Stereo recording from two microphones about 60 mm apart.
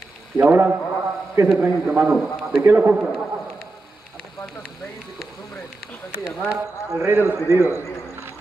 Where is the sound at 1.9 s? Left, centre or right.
Centre.